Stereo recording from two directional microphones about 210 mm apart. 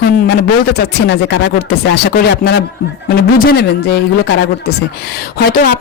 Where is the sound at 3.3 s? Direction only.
45° left (ahead or behind).